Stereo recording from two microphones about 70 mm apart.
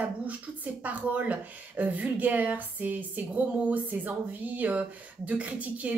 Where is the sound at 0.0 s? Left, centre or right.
Right.